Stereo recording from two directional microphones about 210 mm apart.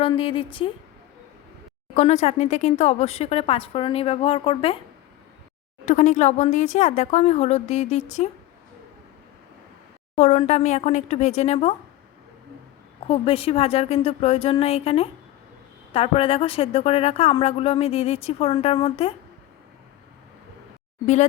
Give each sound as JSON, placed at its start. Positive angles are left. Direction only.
{"t": 0.0, "sound": "a woman's voice", "side_deg": 25}
{"t": 2.2, "sound": "a woman's voice", "side_deg": 35}
{"t": 5.8, "sound": "speech", "side_deg": 35}
{"t": 10.2, "sound": "speech", "side_deg": 35}
{"t": 13.1, "sound": "a woman's voice", "side_deg": 25}